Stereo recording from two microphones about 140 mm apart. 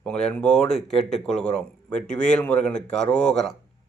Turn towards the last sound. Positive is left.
turn(degrees=5)  # may be behind; listen again after turning